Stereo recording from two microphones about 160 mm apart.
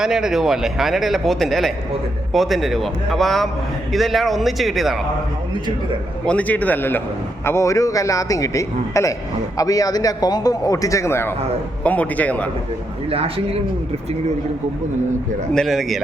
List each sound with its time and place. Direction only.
0.0 s speech: 5° right (ahead or behind)
6.2 s a man's voice: 10° left (ahead or behind)
13.1 s speech: 35° right (ahead or behind)
15.5 s speech: centre (ahead or behind)